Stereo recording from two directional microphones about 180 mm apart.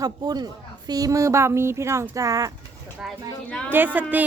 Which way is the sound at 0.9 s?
20° right (ahead or behind).